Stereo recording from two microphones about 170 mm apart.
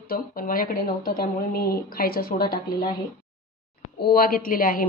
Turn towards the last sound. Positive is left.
turn(degrees=55)  # may be behind; listen again after turning